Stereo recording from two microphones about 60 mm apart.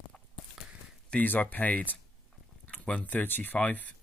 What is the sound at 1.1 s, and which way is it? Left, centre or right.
Speech, left.